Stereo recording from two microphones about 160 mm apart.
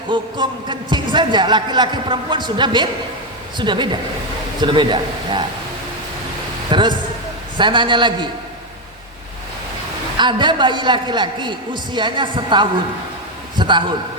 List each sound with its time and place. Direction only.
0.1 s speech: 30° right (ahead or behind)
6.7 s speech: 30° right (ahead or behind)
10.2 s speech: 30° right (ahead or behind)